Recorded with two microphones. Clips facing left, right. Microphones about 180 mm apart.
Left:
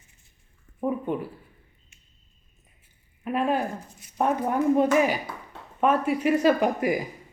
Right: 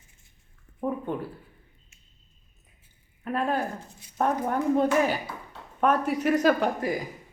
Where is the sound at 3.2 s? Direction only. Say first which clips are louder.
Left 2 dB; 10° left (ahead or behind).